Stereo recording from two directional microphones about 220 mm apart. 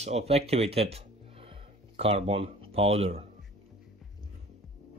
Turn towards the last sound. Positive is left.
turn(degrees=-25)  # may be behind; listen again after turning